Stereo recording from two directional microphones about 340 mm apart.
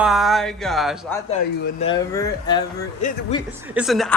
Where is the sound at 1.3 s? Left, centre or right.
Left.